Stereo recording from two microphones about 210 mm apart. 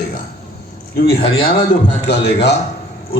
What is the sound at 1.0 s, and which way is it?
A man's voice, 45° left (ahead or behind).